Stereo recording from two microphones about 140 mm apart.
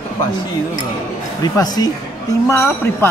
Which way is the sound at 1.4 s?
30° left (ahead or behind).